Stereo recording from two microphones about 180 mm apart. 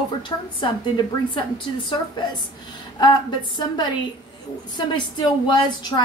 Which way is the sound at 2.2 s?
25° left (ahead or behind).